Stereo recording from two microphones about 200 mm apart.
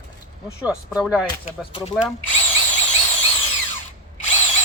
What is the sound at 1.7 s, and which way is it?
Speech, 25° left (ahead or behind).